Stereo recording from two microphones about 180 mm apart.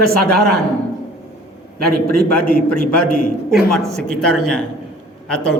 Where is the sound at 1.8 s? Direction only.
55° right (ahead or behind).